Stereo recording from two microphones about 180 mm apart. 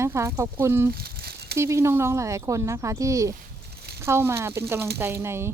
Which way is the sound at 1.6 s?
15° right (ahead or behind).